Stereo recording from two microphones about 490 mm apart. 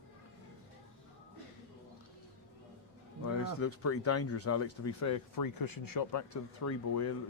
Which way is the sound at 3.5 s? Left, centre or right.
Left.